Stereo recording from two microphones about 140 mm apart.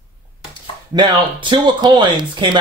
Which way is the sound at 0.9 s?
35° right (ahead or behind).